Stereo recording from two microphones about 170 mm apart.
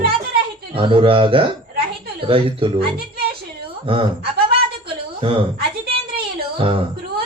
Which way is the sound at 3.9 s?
30° right (ahead or behind).